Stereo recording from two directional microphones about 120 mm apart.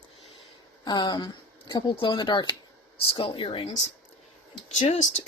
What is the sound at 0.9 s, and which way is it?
Speech, 35° left (ahead or behind).